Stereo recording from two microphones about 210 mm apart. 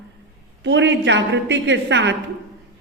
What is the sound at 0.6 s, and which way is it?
A woman's voice, 60° right (ahead or behind).